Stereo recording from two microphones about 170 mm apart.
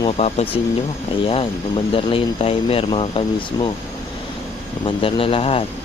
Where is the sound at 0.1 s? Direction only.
40° left (ahead or behind).